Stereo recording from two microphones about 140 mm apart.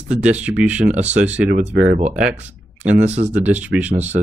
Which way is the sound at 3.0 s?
55° right (ahead or behind).